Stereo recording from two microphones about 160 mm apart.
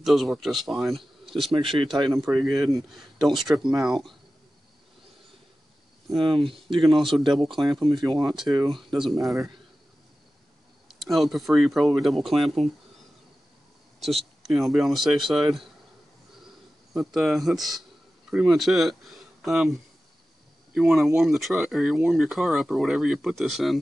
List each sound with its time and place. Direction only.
0.0 s speech: centre (ahead or behind)
1.6 s speech: 35° right (ahead or behind)
2.1 s speech: centre (ahead or behind)
6.8 s speech: centre (ahead or behind)
7.8 s speech: 25° right (ahead or behind)
8.1 s speech: centre (ahead or behind)
11.0 s speech: centre (ahead or behind)
13.9 s speech: centre (ahead or behind)
16.9 s speech: centre (ahead or behind)